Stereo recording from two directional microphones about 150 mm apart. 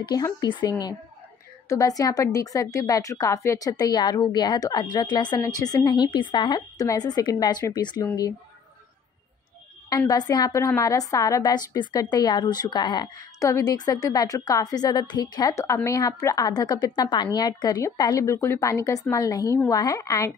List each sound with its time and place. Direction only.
0.0 s a woman's voice: 25° left (ahead or behind)
9.8 s a woman's voice: 25° left (ahead or behind)